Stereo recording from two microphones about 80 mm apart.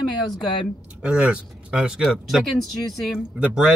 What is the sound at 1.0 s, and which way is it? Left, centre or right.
Speech, centre.